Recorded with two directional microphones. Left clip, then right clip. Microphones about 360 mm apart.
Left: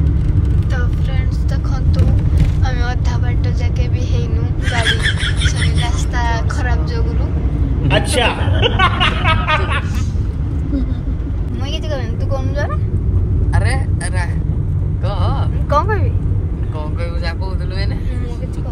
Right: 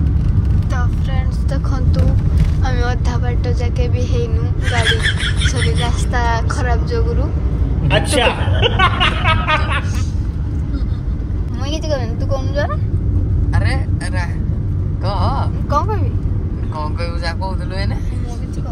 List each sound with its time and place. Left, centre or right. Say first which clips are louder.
2.7 s vehicle: right 5 dB; centre
4.6 s a man's voice: even; centre
6.1 s speech: right 3 dB; centre
7.9 s a man's voice: right 1 dB; centre